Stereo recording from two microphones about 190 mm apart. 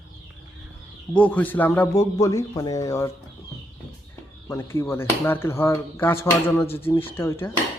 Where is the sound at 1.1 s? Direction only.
10° left (ahead or behind).